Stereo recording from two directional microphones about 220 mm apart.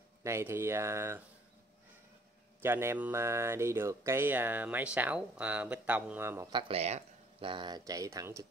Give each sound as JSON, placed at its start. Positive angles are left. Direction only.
{"t": 0.2, "sound": "speech", "side_deg": -10}
{"t": 2.6, "sound": "speech", "side_deg": -10}
{"t": 6.7, "sound": "speech", "side_deg": -30}